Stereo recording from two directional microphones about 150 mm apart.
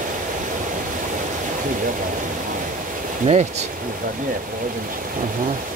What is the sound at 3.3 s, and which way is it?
Speech, 50° right (ahead or behind).